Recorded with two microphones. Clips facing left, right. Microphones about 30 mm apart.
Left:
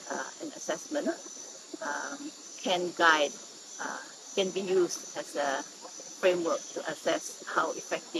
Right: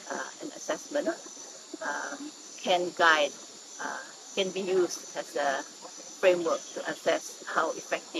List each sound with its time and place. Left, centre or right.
0.1 s cricket: centre
1.9 s speech: centre